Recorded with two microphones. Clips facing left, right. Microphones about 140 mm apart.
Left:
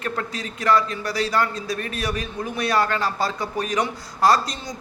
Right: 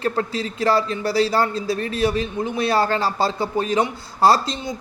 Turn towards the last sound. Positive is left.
turn(degrees=-25)  # may be behind; listen again after turning